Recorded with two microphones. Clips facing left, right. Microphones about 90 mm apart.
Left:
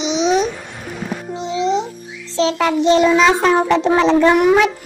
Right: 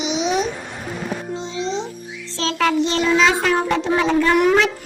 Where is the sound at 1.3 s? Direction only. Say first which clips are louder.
Left 9 dB; 20° left (ahead or behind).